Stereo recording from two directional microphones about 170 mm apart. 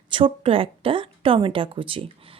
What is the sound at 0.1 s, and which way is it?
Speech, 30° right (ahead or behind).